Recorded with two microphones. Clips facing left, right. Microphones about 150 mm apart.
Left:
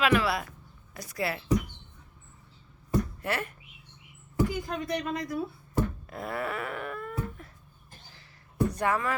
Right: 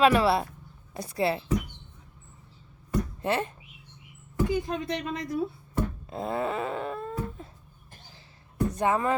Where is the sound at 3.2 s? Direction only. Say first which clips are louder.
Right 4 dB; 20° right (ahead or behind).